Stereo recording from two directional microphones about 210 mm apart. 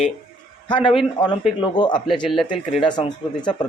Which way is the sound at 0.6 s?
25° left (ahead or behind).